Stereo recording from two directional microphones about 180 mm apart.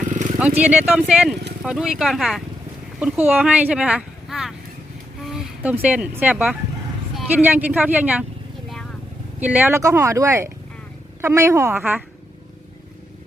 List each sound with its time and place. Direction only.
0.1 s a sound: 45° right (ahead or behind)
0.6 s speech: 5° right (ahead or behind)
9.4 s speech: 10° right (ahead or behind)